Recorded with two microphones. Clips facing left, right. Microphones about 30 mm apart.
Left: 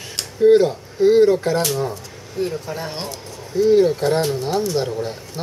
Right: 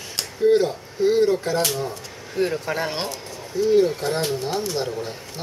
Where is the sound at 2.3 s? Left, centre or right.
Right.